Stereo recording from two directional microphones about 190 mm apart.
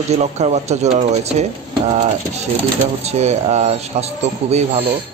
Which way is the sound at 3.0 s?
35° right (ahead or behind).